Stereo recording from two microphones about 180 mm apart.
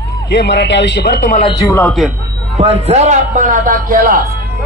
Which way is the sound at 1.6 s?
10° left (ahead or behind).